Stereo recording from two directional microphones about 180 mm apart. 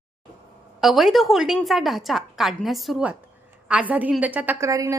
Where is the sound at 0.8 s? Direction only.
Centre (ahead or behind).